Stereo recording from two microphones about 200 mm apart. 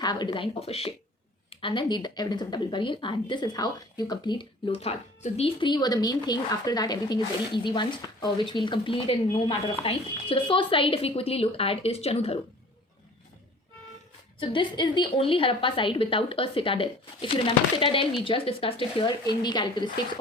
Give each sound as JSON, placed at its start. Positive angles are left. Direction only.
{"t": 0.0, "sound": "speech", "side_deg": 20}
{"t": 14.3, "sound": "speech", "side_deg": 25}